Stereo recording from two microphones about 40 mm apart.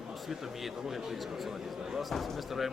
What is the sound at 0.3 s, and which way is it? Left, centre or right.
A man's voice, centre.